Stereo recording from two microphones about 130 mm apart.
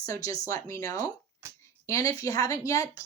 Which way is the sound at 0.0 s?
25° left (ahead or behind).